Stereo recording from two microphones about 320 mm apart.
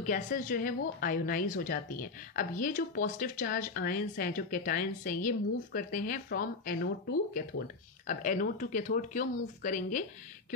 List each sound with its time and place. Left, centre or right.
0.0 s speech: left